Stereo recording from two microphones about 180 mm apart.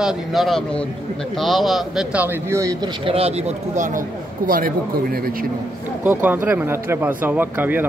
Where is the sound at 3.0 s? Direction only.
35° right (ahead or behind); by 5.5 s 55° right (ahead or behind).